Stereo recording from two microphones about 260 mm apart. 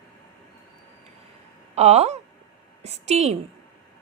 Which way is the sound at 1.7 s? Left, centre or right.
Right.